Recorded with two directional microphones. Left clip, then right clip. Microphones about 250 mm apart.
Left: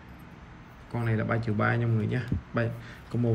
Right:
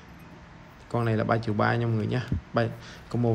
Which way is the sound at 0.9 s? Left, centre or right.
Centre.